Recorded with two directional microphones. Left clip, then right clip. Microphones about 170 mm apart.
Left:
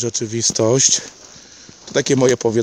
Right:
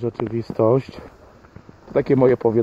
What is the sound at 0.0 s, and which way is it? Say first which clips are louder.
Speech: left 5 dB; 30° left (ahead or behind).